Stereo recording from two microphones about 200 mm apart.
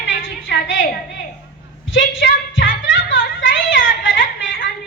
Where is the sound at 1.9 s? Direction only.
70° left (ahead or behind).